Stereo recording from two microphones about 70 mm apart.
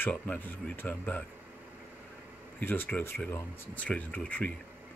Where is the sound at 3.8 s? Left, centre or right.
Centre.